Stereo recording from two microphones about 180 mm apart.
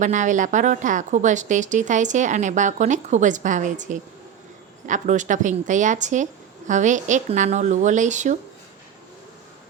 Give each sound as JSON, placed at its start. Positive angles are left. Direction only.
{"t": 0.0, "sound": "a woman's voice", "side_deg": -45}